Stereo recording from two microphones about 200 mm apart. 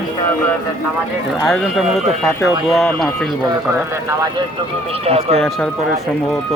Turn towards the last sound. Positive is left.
turn(degrees=-30)  # may be behind; listen again after turning